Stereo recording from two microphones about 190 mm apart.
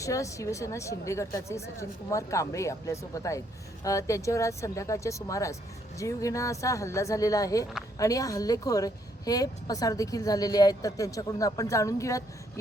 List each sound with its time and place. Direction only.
0.0 s a woman's voice: 15° left (ahead or behind)